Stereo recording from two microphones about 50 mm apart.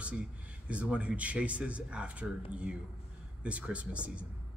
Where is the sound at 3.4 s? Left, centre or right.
Right.